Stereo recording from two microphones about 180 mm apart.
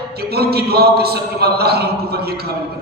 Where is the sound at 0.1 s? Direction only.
60° right (ahead or behind).